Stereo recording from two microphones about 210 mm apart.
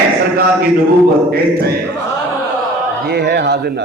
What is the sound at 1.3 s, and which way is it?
Speech, 50° right (ahead or behind).